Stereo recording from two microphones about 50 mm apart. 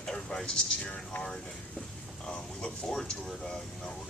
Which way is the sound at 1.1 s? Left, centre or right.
Left.